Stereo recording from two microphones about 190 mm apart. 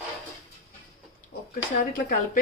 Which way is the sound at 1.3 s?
45° left (ahead or behind).